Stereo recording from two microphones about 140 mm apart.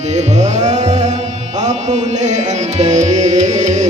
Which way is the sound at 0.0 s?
55° right (ahead or behind).